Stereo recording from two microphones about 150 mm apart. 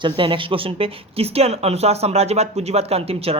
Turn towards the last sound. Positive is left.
turn(degrees=-40)  # may be behind; listen again after turning